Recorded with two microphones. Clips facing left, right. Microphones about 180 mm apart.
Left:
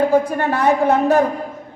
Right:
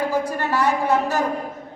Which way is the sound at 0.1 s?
55° left (ahead or behind).